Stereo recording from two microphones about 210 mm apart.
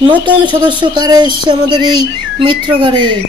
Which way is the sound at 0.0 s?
20° right (ahead or behind).